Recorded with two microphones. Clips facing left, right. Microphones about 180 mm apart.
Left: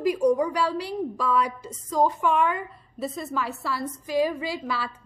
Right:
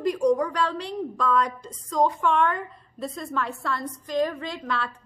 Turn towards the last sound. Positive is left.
turn(degrees=5)  # may be behind; listen again after turning